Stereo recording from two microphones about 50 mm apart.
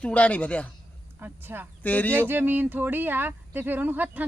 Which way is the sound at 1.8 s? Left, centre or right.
Left.